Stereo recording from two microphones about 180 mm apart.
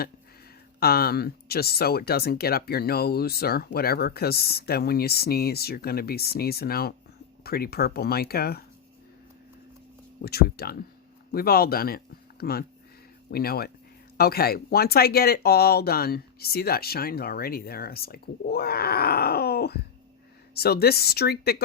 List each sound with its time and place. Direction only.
0.8 s speech: 60° left (ahead or behind)
10.2 s speech: 60° left (ahead or behind)